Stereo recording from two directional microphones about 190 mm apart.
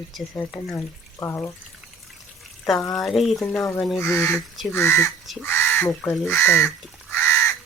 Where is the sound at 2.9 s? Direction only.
Centre (ahead or behind).